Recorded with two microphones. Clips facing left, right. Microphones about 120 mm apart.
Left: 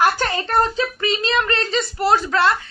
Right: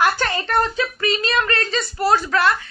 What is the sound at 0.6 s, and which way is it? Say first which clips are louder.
Speech: left 1 dB; 20° left (ahead or behind).